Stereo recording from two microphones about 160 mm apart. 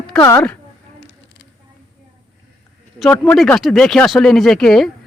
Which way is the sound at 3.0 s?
5° left (ahead or behind).